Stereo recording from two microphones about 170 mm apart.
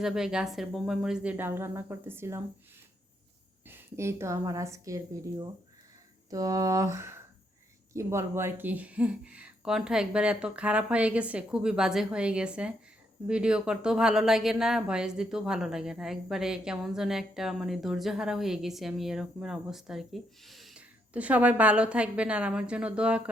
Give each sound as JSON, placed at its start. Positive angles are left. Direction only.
{"t": 0.0, "sound": "speech", "side_deg": -5}
{"t": 3.7, "sound": "speech", "side_deg": -15}